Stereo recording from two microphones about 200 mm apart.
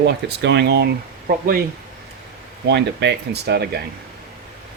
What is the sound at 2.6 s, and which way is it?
Speech, 60° right (ahead or behind).